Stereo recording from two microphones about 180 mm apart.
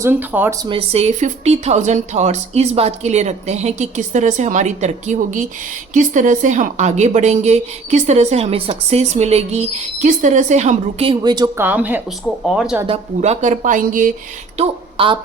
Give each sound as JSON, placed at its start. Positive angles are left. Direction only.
{"t": 0.0, "sound": "speech", "side_deg": -10}
{"t": 0.6, "sound": "a woman's voice", "side_deg": -30}
{"t": 12.9, "sound": "speech", "side_deg": -35}
{"t": 14.6, "sound": "a woman's voice", "side_deg": -30}